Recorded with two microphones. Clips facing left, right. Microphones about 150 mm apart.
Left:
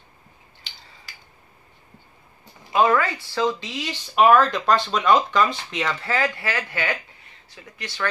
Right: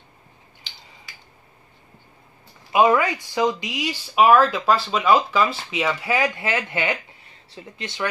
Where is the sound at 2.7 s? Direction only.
15° right (ahead or behind).